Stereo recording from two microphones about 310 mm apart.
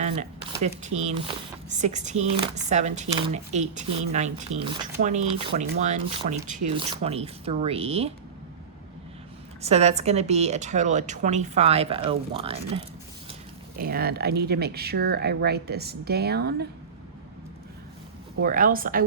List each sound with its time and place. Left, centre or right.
0.0 s a woman's voice: right
9.6 s a woman's voice: right
13.7 s speech: right
18.4 s a woman's voice: right